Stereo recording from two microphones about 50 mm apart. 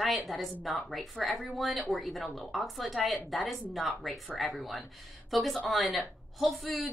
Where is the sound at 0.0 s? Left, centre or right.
Centre.